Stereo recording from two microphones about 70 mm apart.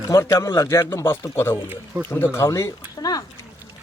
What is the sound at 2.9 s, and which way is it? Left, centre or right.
Speech, left.